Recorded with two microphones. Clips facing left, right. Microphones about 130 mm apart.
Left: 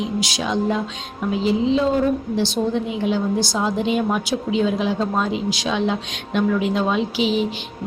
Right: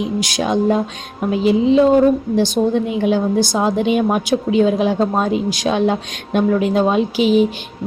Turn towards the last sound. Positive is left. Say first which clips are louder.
# right 5 dB
turn(degrees=-50)  # may be behind; listen again after turning